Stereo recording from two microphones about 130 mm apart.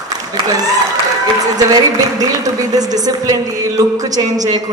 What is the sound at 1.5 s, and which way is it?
A woman's voice, 30° right (ahead or behind).